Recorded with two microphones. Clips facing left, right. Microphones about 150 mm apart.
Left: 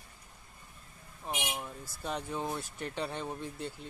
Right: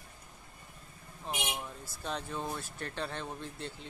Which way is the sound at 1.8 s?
10° left (ahead or behind).